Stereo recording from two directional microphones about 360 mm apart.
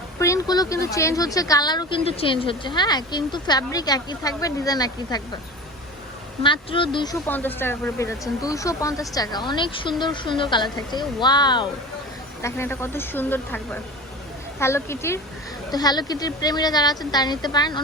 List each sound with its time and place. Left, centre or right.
0.2 s speech: centre
6.4 s speech: centre